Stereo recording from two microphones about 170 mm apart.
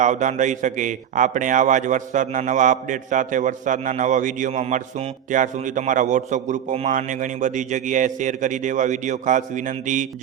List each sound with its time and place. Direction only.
0.0 s a man's voice: 45° right (ahead or behind)